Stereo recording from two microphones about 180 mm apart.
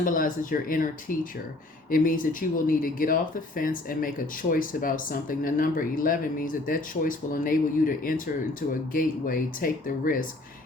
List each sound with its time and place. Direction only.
0.0 s speech: 50° left (ahead or behind)